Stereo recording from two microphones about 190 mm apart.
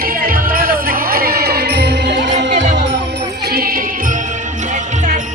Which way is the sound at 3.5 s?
50° right (ahead or behind).